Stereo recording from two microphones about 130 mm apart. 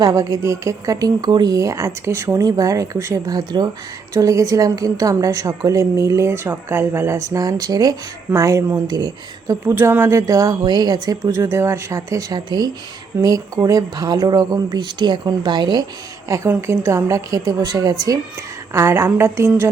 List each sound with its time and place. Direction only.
0.0 s a woman's voice: 25° right (ahead or behind)
9.6 s a woman's voice: 20° right (ahead or behind)